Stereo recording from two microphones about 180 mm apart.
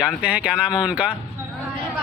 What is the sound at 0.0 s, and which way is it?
Speech, 5° right (ahead or behind).